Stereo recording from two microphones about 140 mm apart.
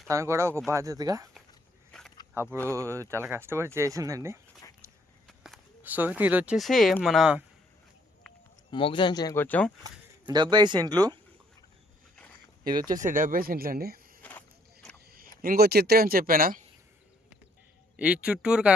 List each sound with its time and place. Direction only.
0.1 s speech: 20° right (ahead or behind)
1.9 s a sound: 5° left (ahead or behind)
2.3 s speech: 20° right (ahead or behind)
5.8 s speech: 10° right (ahead or behind)
8.7 s speech: 35° left (ahead or behind)
9.3 s speech: 15° left (ahead or behind)
9.8 s speech: 30° right (ahead or behind)
12.9 s speech: 75° right (ahead or behind); by 14.2 s 90° right
14.2 s walk: 10° left (ahead or behind)
15.0 s speech: 90° right
17.9 s speech: 10° right (ahead or behind)